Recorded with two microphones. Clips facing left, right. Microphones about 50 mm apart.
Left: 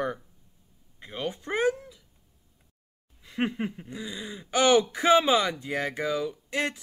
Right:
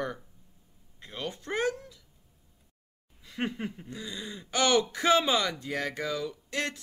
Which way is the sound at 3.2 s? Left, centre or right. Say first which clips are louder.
Left 4 dB; centre.